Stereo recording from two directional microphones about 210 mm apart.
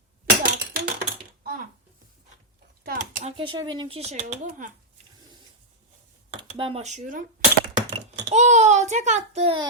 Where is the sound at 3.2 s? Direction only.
25° right (ahead or behind).